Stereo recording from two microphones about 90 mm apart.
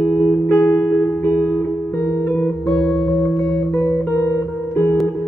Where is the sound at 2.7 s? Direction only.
10° left (ahead or behind).